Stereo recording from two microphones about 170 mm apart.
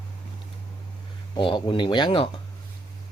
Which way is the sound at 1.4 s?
30° left (ahead or behind).